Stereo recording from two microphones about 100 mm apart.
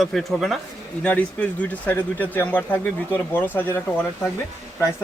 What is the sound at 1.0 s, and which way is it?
Speech, 15° left (ahead or behind).